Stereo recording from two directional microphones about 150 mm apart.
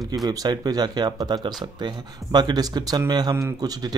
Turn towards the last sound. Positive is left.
turn(degrees=-25)  # may be behind; listen again after turning